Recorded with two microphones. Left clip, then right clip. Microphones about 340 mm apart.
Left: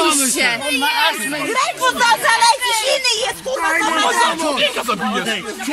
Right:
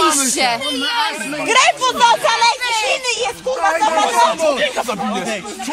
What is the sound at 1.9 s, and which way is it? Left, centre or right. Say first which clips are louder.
Speech: left 2 dB; centre.